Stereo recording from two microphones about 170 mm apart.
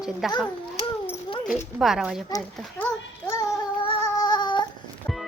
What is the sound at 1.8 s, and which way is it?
Speech, centre (ahead or behind).